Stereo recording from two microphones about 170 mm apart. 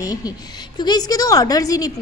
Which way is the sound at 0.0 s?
20° left (ahead or behind).